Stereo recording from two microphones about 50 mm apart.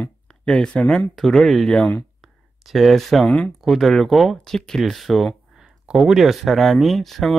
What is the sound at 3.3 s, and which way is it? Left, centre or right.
Speech, centre.